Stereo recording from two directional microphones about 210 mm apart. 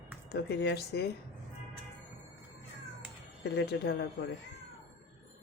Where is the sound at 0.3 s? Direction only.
50° left (ahead or behind).